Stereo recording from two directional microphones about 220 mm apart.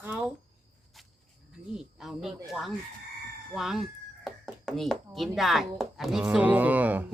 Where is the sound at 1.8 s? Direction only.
Centre (ahead or behind).